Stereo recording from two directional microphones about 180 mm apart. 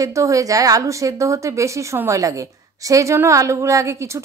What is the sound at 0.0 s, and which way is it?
A woman's voice, 15° right (ahead or behind).